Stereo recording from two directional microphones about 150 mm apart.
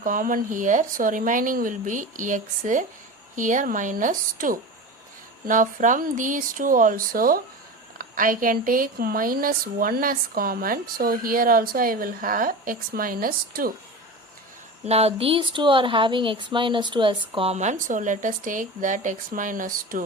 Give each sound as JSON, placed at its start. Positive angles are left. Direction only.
{"t": 0.0, "sound": "speech", "side_deg": -65}
{"t": 14.8, "sound": "speech", "side_deg": -40}